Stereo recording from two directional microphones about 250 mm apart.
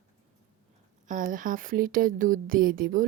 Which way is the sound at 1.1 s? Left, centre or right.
Right.